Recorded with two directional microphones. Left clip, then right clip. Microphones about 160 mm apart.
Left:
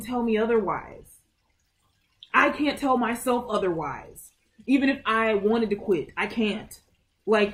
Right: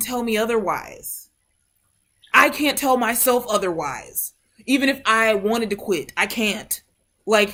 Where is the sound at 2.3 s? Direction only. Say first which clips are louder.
Right 6 dB; 15° right (ahead or behind).